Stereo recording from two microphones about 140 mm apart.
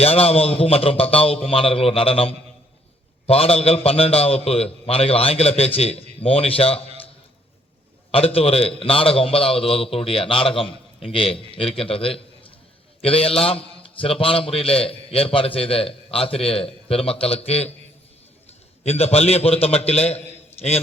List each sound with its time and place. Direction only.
0.0 s a man's voice: 45° left (ahead or behind)
8.1 s a man's voice: 45° left (ahead or behind)
18.8 s a man's voice: 50° left (ahead or behind)